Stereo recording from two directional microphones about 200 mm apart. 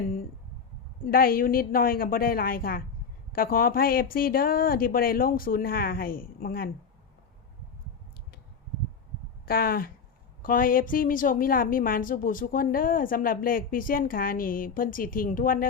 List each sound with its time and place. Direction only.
1.1 s a woman's voice: 45° left (ahead or behind)
9.5 s a woman's voice: 45° left (ahead or behind)